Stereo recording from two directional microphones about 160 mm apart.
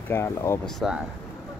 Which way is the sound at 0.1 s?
15° left (ahead or behind).